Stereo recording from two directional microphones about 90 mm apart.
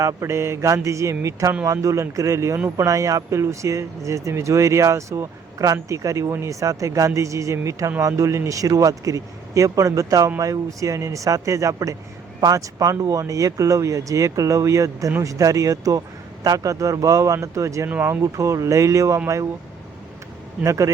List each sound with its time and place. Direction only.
0.0 s speech: 35° right (ahead or behind)
17.8 s speech: 20° right (ahead or behind)
18.1 s speech: 35° right (ahead or behind)
20.7 s speech: 35° right (ahead or behind)